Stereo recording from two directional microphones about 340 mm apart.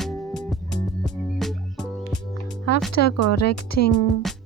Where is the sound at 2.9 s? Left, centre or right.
Left.